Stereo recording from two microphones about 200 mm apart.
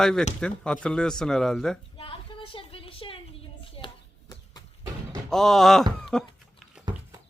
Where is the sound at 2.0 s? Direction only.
25° left (ahead or behind).